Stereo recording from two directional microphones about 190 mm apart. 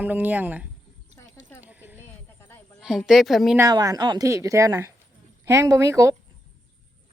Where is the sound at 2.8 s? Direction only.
Centre (ahead or behind).